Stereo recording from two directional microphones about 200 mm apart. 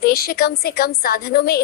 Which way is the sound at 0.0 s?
50° left (ahead or behind).